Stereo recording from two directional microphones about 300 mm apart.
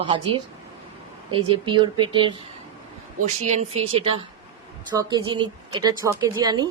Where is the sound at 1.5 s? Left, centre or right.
Centre.